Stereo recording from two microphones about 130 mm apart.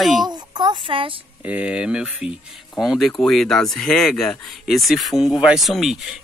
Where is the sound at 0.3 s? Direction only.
35° right (ahead or behind).